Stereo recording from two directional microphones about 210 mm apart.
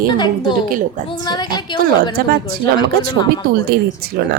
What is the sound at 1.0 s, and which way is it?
Speech, 20° left (ahead or behind).